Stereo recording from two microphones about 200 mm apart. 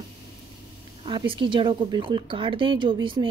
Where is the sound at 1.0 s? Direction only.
25° right (ahead or behind).